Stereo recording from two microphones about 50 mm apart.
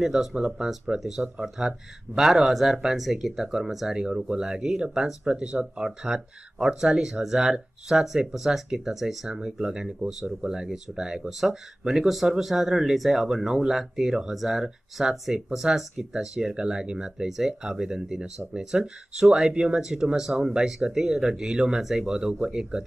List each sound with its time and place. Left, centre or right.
0.0 s speech: centre